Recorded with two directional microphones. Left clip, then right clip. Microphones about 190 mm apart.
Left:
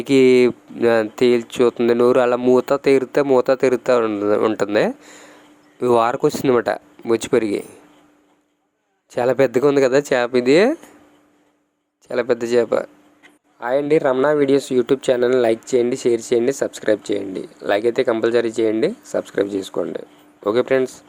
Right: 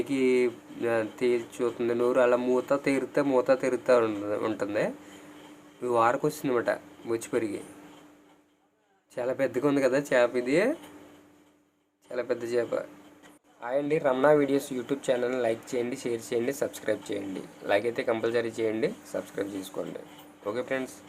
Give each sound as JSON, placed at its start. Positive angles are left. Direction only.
{"t": 0.0, "sound": "speech", "side_deg": 50}
{"t": 9.1, "sound": "speech", "side_deg": 50}
{"t": 12.0, "sound": "speech", "side_deg": 45}